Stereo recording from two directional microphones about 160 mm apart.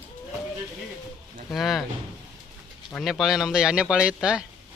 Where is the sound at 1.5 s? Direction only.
Centre (ahead or behind).